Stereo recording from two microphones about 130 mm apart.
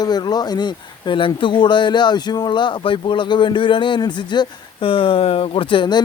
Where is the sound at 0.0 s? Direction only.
30° left (ahead or behind).